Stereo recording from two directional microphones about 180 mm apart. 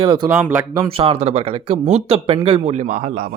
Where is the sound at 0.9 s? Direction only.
30° right (ahead or behind).